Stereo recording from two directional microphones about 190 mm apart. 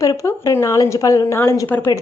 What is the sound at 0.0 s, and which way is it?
A woman's voice, 15° left (ahead or behind).